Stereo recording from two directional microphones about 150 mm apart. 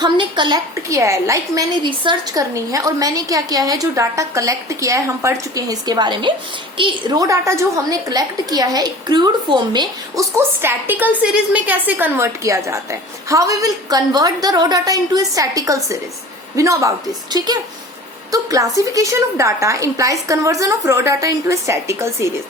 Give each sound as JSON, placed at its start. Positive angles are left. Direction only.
{"t": 0.0, "sound": "a woman's voice", "side_deg": -30}
{"t": 10.3, "sound": "a woman's voice", "side_deg": -15}